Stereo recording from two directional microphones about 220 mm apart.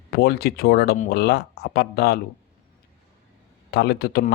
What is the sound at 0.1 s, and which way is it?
Speech, 45° left (ahead or behind).